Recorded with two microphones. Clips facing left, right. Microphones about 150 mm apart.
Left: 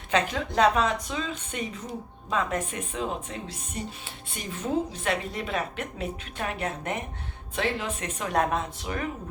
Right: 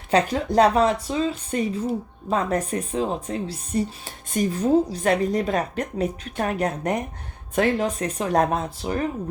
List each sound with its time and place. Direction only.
0.1 s a woman's voice: 35° right (ahead or behind)